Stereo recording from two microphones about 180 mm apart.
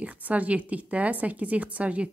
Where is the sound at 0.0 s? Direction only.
10° right (ahead or behind).